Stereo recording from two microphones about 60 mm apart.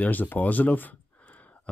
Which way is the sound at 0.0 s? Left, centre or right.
Left.